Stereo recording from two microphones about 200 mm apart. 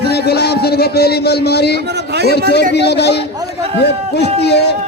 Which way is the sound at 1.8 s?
55° right (ahead or behind).